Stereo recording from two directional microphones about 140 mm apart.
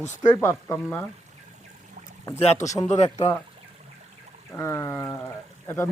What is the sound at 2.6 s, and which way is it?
Speech, 25° left (ahead or behind).